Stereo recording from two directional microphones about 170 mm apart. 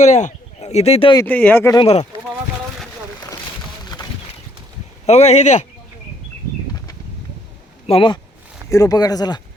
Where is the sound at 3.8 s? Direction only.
25° left (ahead or behind).